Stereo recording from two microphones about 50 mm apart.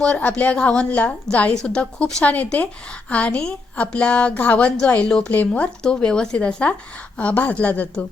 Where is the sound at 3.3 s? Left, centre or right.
Centre; by 8.0 s left.